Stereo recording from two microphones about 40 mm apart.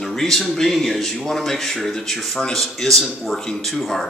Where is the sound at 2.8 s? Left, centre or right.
Centre.